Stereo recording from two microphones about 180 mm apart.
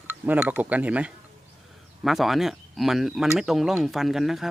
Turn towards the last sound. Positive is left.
turn(degrees=0)  # may be behind; listen again after turning